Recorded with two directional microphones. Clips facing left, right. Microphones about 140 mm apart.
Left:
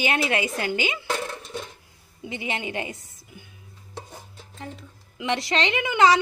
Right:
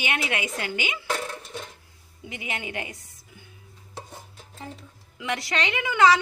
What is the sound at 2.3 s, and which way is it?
Speech, 30° left (ahead or behind).